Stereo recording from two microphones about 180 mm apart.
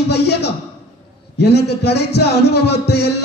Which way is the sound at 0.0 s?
65° left (ahead or behind).